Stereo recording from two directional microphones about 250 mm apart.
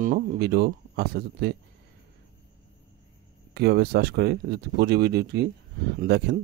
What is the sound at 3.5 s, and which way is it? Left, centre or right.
Speech, right.